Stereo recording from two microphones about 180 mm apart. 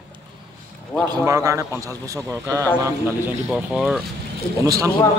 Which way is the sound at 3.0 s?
5° right (ahead or behind).